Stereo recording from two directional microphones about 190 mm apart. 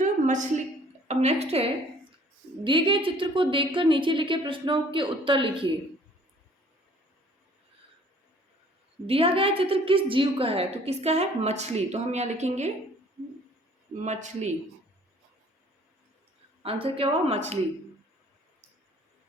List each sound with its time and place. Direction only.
0.0 s a sound: 40° right (ahead or behind)
1.0 s a woman's voice: 35° right (ahead or behind)
9.0 s a woman's voice: 30° right (ahead or behind)
14.0 s a woman's voice: 35° right (ahead or behind)
16.6 s a woman's voice: 30° right (ahead or behind)